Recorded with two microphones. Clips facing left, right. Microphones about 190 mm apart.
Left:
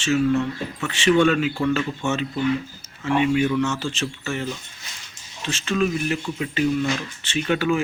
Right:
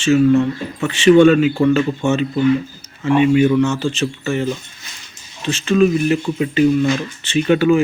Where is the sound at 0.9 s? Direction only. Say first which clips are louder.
Right 8 dB; centre (ahead or behind).